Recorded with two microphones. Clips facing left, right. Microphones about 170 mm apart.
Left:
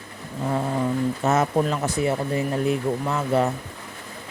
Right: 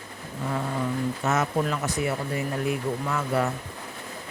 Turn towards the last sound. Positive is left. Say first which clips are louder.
# left 4 dB
turn(degrees=25)  # may be behind; listen again after turning